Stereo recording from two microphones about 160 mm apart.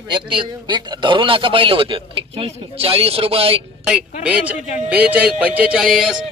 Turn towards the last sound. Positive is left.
turn(degrees=-5)  # may be behind; listen again after turning